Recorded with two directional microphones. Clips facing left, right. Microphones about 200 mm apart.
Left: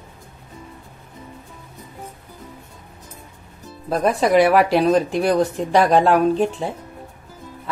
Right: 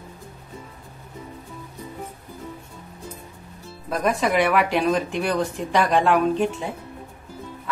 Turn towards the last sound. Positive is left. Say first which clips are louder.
# left 3 dB
turn(degrees=35)  # may be behind; listen again after turning